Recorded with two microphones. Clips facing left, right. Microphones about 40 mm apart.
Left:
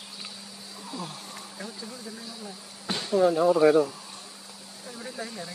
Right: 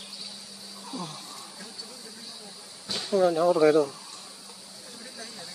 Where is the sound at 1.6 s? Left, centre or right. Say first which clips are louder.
Left 5 dB; left.